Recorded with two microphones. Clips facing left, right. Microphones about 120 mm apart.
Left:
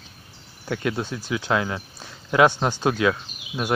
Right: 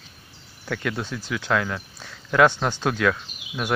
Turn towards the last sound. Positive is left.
turn(degrees=15)  # may be behind; listen again after turning